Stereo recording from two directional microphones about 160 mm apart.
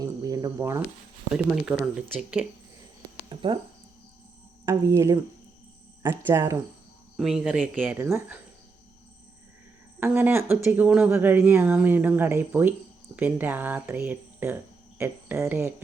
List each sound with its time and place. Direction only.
0.0 s cricket: 20° right (ahead or behind)
1.3 s speech: 5° right (ahead or behind)
3.2 s speech: 30° right (ahead or behind)
4.6 s speech: 20° right (ahead or behind)
7.2 s speech: 5° right (ahead or behind)
10.0 s speech: 15° right (ahead or behind)